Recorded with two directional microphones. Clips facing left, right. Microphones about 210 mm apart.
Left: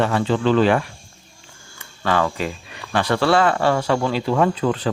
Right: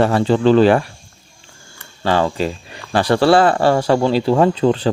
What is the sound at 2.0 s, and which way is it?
Speech, 30° right (ahead or behind).